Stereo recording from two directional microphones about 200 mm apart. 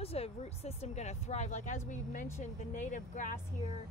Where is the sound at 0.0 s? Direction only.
30° left (ahead or behind).